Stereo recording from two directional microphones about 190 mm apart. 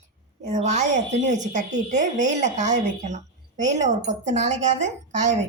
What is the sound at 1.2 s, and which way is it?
A woman's voice, 40° right (ahead or behind).